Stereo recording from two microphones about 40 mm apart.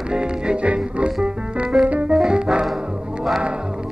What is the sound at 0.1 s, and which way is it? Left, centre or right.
Music, right.